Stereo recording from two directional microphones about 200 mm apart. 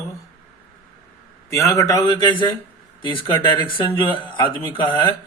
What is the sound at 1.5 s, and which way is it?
A man's voice, 15° left (ahead or behind).